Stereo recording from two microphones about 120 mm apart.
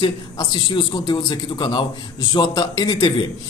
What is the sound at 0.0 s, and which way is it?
A man's voice, 40° left (ahead or behind).